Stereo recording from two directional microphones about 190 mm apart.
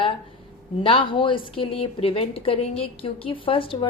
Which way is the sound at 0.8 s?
30° left (ahead or behind).